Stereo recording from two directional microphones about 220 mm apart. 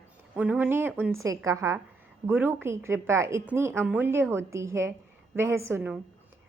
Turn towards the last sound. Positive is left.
turn(degrees=-10)  # may be behind; listen again after turning